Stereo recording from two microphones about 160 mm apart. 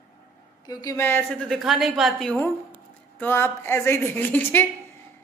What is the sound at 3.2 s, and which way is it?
Speech, 15° left (ahead or behind).